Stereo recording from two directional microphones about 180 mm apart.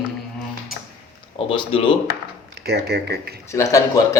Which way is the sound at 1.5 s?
30° left (ahead or behind).